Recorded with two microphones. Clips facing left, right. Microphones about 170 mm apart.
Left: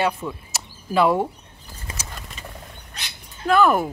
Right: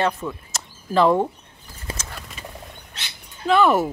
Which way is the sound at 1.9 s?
30° right (ahead or behind).